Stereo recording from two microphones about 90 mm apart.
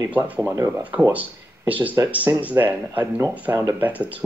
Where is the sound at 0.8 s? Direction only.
15° right (ahead or behind).